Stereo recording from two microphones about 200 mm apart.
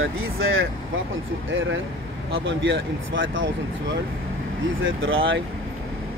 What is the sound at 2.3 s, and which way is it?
Speech, 70° right (ahead or behind).